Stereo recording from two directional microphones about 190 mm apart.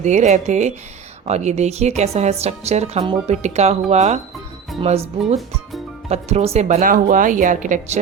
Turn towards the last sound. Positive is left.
turn(degrees=-40)  # may be behind; listen again after turning